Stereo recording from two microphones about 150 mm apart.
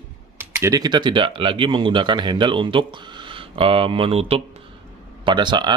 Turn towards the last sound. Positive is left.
turn(degrees=-30)  # may be behind; listen again after turning